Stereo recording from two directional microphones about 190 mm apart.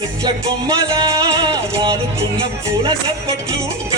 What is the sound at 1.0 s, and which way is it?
Music, 15° right (ahead or behind).